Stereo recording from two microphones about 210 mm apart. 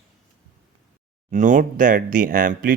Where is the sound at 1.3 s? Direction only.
35° right (ahead or behind).